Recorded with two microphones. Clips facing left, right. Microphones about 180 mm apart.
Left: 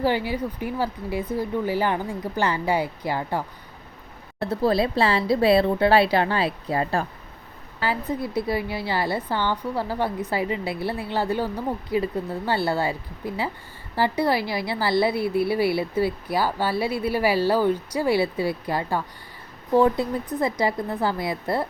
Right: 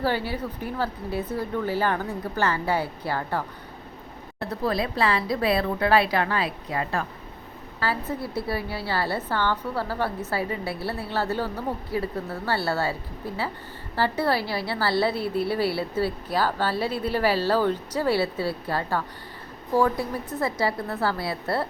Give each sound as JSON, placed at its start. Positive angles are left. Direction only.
{"t": 0.0, "sound": "a woman's voice", "side_deg": 15}
{"t": 4.4, "sound": "speech", "side_deg": 30}
{"t": 7.8, "sound": "a woman's voice", "side_deg": 15}